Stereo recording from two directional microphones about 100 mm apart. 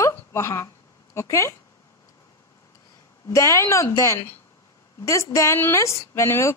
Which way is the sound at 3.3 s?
30° left (ahead or behind).